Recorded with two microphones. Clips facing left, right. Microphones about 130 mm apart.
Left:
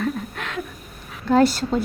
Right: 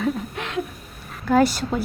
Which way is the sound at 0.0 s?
5° right (ahead or behind).